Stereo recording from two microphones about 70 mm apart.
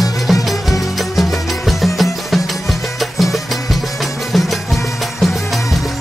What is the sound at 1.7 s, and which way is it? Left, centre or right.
Music, centre.